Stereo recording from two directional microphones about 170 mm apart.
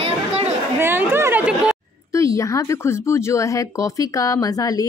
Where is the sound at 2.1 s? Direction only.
20° left (ahead or behind).